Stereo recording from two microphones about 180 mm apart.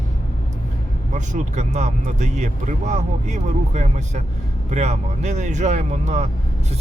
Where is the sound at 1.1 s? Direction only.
40° right (ahead or behind).